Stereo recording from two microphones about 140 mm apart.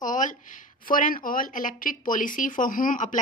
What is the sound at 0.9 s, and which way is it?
Speech, 85° left.